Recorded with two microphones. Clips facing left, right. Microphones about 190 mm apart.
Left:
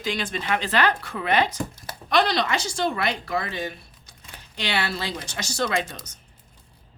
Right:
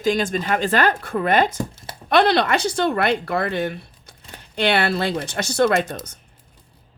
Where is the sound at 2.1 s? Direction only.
60° right (ahead or behind).